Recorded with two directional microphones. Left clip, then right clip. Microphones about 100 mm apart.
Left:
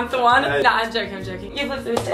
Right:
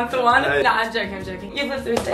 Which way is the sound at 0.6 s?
20° left (ahead or behind).